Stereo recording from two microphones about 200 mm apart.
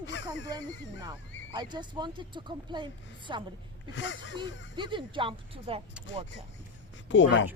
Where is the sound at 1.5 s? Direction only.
20° right (ahead or behind).